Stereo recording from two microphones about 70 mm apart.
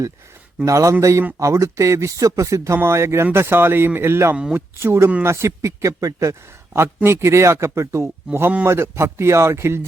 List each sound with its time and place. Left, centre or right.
0.6 s speech: right
2.7 s a man's voice: right
6.7 s a man's voice: right